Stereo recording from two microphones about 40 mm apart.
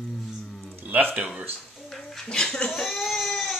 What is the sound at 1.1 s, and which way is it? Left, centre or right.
Speech, right.